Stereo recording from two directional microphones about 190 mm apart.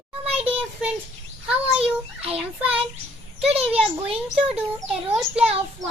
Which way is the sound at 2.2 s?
30° right (ahead or behind).